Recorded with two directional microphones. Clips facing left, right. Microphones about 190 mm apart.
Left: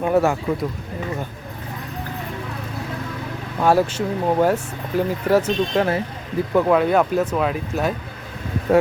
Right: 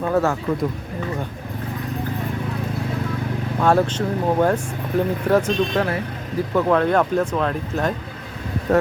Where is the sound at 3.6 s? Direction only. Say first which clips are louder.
Left 1 dB; 10° left (ahead or behind).